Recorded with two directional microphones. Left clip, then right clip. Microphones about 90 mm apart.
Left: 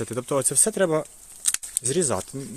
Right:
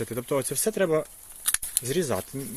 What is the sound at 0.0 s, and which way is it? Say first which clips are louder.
Speech: left 3 dB; 45° left (ahead or behind).